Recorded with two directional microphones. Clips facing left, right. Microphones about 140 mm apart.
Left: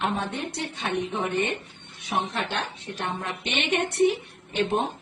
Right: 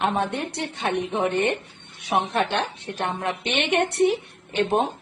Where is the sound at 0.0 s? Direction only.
65° right (ahead or behind).